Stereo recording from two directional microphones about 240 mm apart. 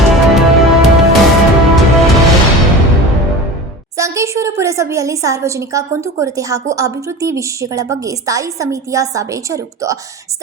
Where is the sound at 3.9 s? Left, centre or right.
Centre.